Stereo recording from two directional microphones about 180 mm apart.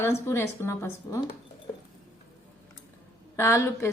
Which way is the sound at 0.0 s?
15° left (ahead or behind).